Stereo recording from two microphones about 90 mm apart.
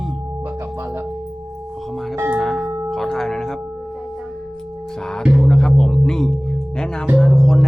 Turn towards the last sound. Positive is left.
turn(degrees=5)  # may be behind; listen again after turning